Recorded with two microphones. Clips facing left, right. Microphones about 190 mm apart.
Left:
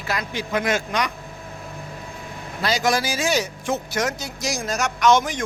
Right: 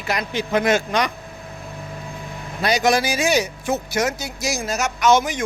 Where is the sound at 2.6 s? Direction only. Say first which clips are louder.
Right 3 dB; 20° right (ahead or behind).